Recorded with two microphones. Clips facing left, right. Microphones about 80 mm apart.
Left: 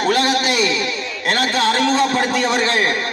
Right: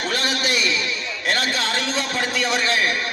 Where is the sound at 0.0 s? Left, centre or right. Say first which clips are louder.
Left 7 dB; left.